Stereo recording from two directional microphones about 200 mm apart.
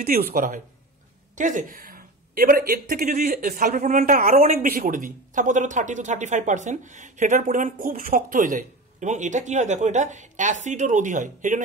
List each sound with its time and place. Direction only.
0.0 s speech: 50° right (ahead or behind)